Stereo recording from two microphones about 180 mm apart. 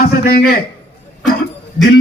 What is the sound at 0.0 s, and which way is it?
Speech, 55° left (ahead or behind).